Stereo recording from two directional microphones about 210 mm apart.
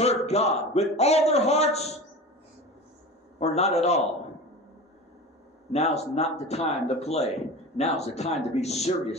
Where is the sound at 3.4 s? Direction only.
30° left (ahead or behind).